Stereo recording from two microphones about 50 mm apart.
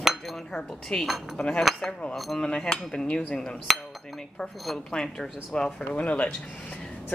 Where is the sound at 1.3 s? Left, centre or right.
Centre.